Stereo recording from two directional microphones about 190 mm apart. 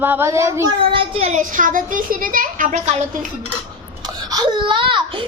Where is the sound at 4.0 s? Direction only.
20° right (ahead or behind).